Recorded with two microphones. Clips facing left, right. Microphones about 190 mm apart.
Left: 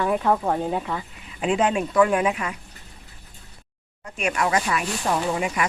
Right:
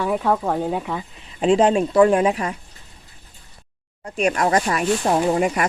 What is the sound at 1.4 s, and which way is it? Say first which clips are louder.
Speech: right 6 dB; 35° right (ahead or behind).